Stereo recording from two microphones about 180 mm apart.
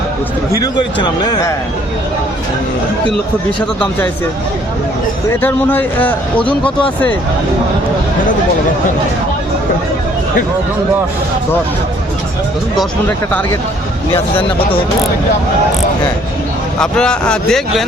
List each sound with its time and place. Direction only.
0.5 s speech: 25° left (ahead or behind)
5.4 s speech: 10° left (ahead or behind)
12.7 s speech: 5° left (ahead or behind)
16.8 s speech: 5° left (ahead or behind)